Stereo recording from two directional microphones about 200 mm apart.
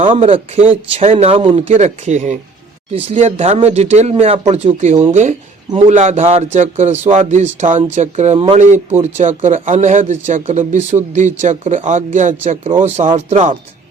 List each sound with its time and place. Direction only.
0.0 s a man's voice: 25° right (ahead or behind)